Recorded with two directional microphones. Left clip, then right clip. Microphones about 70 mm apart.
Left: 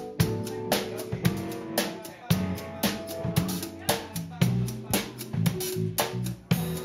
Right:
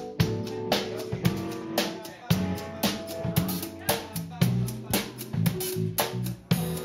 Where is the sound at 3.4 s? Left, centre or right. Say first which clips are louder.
Even; centre.